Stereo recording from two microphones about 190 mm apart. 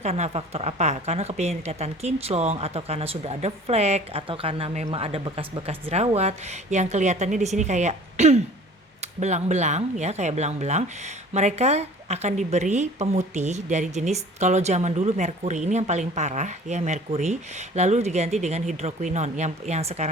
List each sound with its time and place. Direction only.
0.0 s speech: 35° right (ahead or behind)